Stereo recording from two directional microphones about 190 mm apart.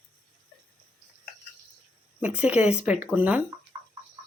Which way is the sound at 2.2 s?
5° right (ahead or behind).